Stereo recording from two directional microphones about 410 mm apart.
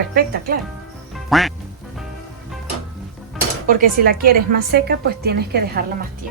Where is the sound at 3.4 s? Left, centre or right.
Centre.